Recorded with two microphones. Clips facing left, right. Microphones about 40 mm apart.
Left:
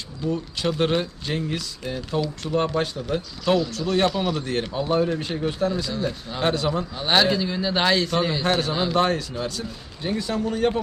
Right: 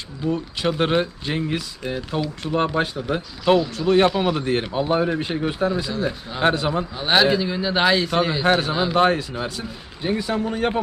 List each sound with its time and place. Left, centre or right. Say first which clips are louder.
0.2 s speech: right 2 dB; right
6.9 s a man's voice: right 3 dB; centre